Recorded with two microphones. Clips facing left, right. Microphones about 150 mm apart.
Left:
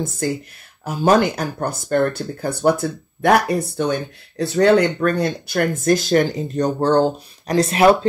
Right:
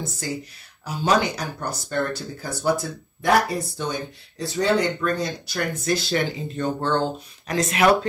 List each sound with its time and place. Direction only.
0.2 s speech: 55° left (ahead or behind); by 8.1 s 30° left (ahead or behind)